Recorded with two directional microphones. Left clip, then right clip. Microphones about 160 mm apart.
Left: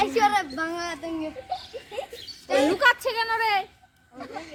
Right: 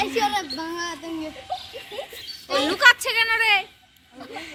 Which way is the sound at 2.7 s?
55° left (ahead or behind).